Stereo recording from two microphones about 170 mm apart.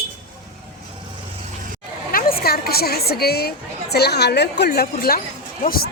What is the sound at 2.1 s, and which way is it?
A woman's voice, 60° left (ahead or behind).